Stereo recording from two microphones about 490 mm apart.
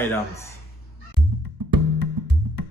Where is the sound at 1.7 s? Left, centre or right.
Right.